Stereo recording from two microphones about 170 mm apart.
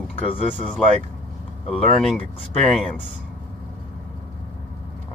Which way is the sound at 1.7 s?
5° left (ahead or behind).